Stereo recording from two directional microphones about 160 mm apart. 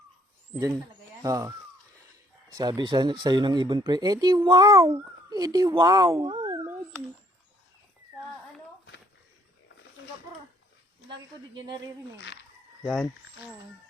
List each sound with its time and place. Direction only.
1.2 s speech: 20° right (ahead or behind)
2.6 s speech: 25° right (ahead or behind)
6.4 s cat: 15° right (ahead or behind)
11.1 s a woman's voice: 30° right (ahead or behind)
12.8 s speech: centre (ahead or behind)